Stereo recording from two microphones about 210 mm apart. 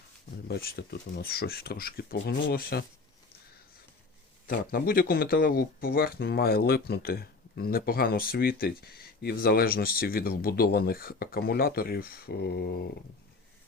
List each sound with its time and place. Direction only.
0.4 s speech: 50° left (ahead or behind)
4.4 s speech: 45° left (ahead or behind)